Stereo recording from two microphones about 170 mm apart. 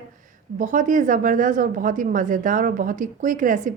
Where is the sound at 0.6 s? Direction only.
50° right (ahead or behind).